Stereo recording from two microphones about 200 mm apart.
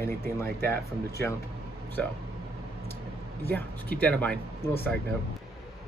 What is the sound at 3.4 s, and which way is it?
Speech, 10° left (ahead or behind).